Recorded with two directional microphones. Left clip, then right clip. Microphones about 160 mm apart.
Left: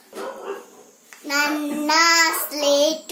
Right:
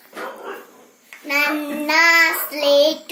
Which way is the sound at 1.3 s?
25° left (ahead or behind).